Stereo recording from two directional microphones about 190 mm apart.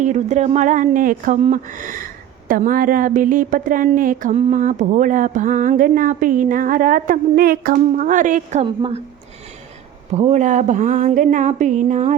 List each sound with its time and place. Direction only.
0.0 s a woman's voice: 40° right (ahead or behind)
8.6 s a woman's voice: 25° right (ahead or behind)
10.2 s speech: 35° right (ahead or behind)